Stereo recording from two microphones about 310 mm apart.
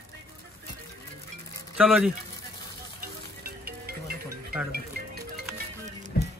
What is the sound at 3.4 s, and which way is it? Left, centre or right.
Music, right.